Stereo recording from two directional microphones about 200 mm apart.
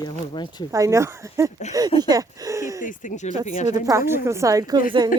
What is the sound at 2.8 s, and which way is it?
Speech, 40° left (ahead or behind).